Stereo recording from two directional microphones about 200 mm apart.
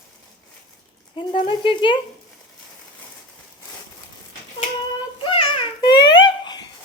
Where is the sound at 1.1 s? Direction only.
25° left (ahead or behind).